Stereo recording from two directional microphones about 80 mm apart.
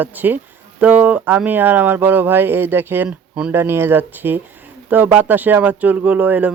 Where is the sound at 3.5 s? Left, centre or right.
Right.